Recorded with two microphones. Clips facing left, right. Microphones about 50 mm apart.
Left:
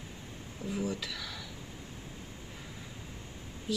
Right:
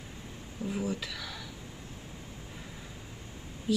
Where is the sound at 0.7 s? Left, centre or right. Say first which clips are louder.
Right 1 dB; centre.